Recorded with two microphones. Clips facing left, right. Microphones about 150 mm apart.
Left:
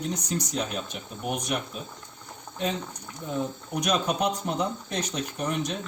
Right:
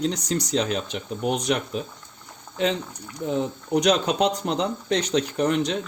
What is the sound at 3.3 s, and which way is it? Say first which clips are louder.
Speech: right 6 dB; 75° right (ahead or behind).